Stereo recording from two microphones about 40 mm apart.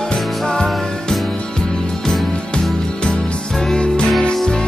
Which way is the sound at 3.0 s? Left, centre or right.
Left.